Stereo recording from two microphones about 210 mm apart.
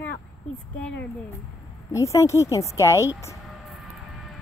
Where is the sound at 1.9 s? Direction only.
15° left (ahead or behind).